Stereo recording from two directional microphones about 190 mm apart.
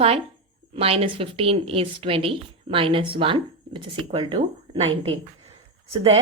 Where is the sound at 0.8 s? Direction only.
30° right (ahead or behind).